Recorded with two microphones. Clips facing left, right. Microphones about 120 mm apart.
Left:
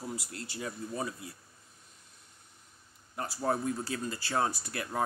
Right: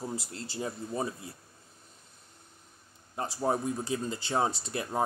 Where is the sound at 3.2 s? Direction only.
20° right (ahead or behind).